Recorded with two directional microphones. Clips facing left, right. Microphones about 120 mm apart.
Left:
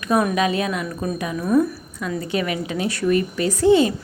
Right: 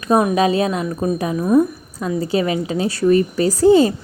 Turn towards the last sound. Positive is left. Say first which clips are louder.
# right 4 dB
turn(degrees=-35)  # may be behind; listen again after turning